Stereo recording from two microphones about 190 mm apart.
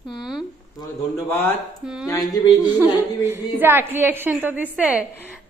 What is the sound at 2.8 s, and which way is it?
A woman's voice, 15° right (ahead or behind).